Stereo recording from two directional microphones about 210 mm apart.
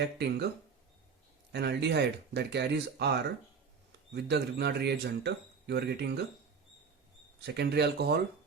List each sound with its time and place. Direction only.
0.0 s speech: 50° right (ahead or behind)
1.5 s speech: 50° right (ahead or behind)
7.4 s speech: 50° right (ahead or behind)